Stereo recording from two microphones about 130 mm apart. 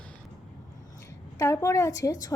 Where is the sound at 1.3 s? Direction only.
20° left (ahead or behind).